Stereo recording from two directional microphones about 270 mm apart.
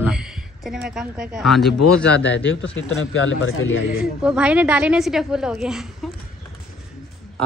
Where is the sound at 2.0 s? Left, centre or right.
Left.